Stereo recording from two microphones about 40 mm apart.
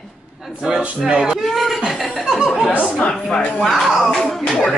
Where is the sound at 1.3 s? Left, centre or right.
Centre.